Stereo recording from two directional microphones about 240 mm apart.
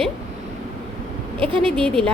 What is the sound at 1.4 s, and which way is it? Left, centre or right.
Speech, right.